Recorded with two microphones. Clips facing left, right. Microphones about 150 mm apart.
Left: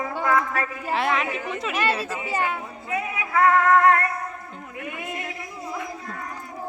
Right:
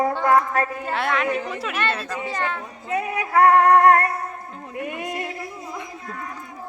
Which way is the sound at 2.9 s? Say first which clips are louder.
Right 4 dB; 40° right (ahead or behind).